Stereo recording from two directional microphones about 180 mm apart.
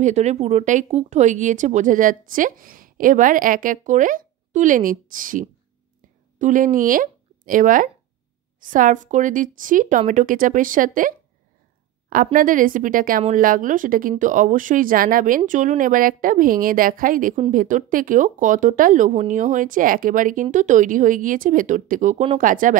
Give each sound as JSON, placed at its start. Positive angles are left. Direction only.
{"t": 0.0, "sound": "speech", "side_deg": -40}
{"t": 12.3, "sound": "speech", "side_deg": -50}